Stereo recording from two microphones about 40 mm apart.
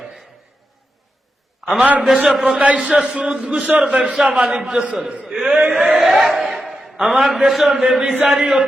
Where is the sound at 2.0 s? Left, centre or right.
Right.